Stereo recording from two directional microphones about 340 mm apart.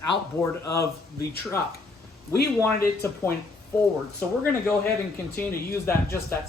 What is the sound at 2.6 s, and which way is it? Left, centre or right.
Speech, centre.